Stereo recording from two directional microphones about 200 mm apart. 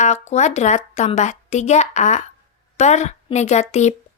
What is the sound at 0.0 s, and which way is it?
A woman's voice, 35° left (ahead or behind).